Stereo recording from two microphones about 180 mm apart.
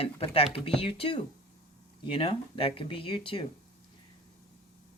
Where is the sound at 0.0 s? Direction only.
30° left (ahead or behind).